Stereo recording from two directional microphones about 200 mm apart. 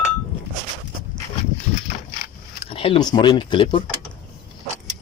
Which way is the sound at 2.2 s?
30° left (ahead or behind).